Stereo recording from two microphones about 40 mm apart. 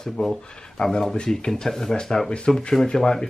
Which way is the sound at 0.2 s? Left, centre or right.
Centre.